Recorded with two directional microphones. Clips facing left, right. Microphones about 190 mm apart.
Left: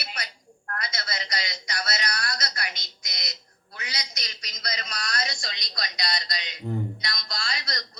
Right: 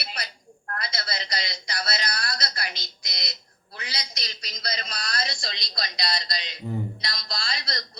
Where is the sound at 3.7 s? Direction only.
30° right (ahead or behind).